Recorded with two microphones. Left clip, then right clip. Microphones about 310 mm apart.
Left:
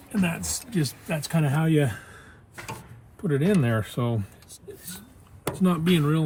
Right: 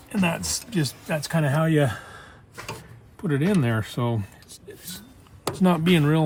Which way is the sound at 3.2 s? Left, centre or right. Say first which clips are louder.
Even; centre.